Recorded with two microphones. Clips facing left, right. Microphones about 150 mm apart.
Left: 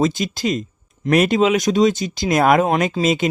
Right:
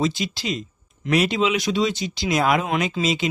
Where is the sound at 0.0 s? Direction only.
45° left (ahead or behind).